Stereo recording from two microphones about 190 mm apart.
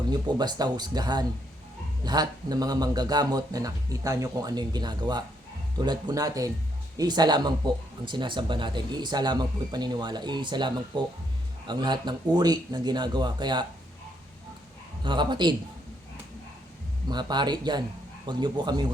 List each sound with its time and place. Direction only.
0.1 s speech: 20° right (ahead or behind)
15.0 s speech: 25° right (ahead or behind)
17.1 s speech: 20° right (ahead or behind)